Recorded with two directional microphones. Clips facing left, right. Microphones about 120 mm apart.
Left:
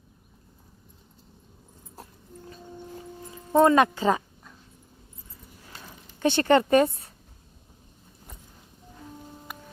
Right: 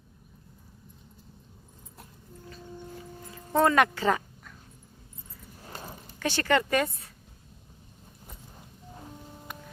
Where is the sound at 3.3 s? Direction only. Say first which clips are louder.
Left 5 dB; 20° left (ahead or behind).